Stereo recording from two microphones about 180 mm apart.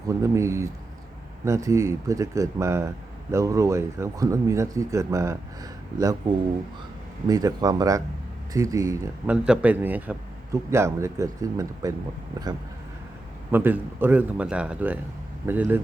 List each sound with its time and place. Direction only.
0.1 s a man's voice: 15° right (ahead or behind)
7.3 s a man's voice: 20° right (ahead or behind)
9.3 s a man's voice: 5° right (ahead or behind)
13.5 s a man's voice: 10° right (ahead or behind)